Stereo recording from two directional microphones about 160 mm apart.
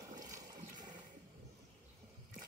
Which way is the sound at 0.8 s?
25° right (ahead or behind).